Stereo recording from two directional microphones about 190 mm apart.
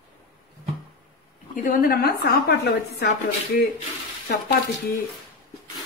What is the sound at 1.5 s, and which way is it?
A man's voice, 50° left (ahead or behind).